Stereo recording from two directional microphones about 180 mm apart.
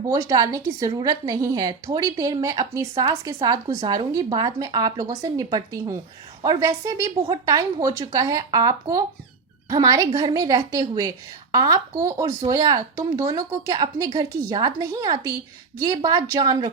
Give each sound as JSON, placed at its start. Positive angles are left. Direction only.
{"t": 0.1, "sound": "a woman's voice", "side_deg": -20}